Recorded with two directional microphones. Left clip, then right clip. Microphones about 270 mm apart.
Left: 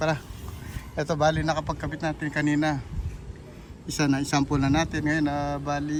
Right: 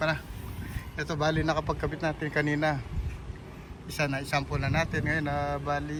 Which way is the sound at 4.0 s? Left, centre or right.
Centre.